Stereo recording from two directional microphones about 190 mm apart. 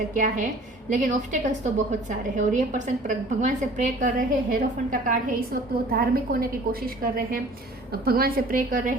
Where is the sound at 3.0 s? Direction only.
40° right (ahead or behind).